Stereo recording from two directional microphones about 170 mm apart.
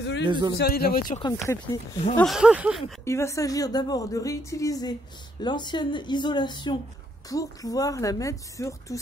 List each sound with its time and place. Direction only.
0.0 s a sound: 90° left
0.3 s a man's voice: 25° right (ahead or behind)
0.6 s speech: 65° left (ahead or behind)
2.1 s speech: centre (ahead or behind)
3.1 s speech: 15° left (ahead or behind)